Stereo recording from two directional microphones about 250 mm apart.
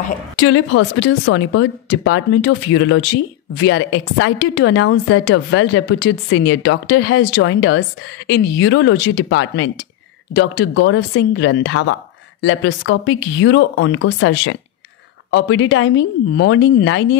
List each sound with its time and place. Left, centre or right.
0.4 s a woman's voice: left